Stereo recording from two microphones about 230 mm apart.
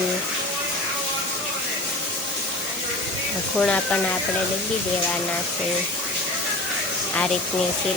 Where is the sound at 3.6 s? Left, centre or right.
Centre.